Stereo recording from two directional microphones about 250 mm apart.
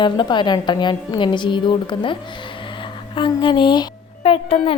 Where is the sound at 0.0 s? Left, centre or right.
Centre.